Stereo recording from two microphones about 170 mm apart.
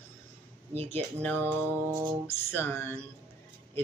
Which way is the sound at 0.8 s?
10° left (ahead or behind).